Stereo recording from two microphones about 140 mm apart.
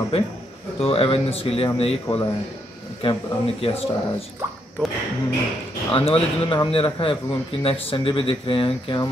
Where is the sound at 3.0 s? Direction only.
40° left (ahead or behind).